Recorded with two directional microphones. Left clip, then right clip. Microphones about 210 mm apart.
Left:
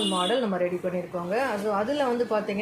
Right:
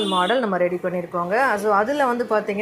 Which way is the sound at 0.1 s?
20° right (ahead or behind).